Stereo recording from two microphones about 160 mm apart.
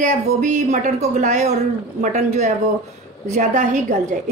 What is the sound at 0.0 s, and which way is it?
A woman's voice, 55° right (ahead or behind).